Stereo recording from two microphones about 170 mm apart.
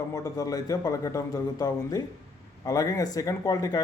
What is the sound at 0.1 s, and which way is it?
Speech, 20° left (ahead or behind).